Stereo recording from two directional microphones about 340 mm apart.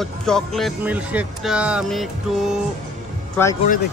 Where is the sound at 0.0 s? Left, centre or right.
Centre.